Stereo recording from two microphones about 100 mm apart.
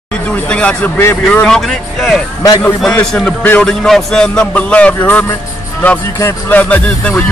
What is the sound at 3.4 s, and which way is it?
Music, 15° left (ahead or behind).